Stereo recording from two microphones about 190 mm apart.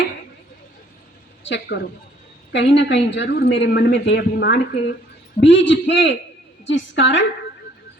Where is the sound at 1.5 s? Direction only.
65° left (ahead or behind).